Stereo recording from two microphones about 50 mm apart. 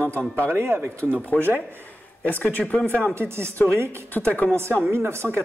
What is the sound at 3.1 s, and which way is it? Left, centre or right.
Speech, right.